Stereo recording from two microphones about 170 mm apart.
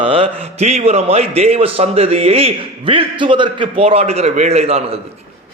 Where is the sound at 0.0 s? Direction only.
35° right (ahead or behind).